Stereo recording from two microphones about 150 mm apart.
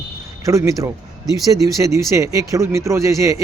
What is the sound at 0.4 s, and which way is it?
Speech, 20° right (ahead or behind).